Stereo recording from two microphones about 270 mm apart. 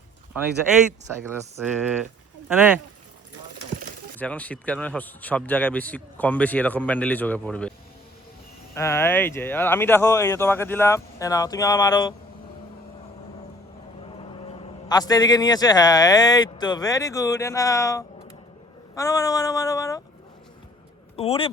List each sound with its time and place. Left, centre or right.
1.2 s a man's voice: centre
4.2 s a man's voice: centre
8.7 s speech: centre
14.8 s speech: centre
21.2 s a man's voice: left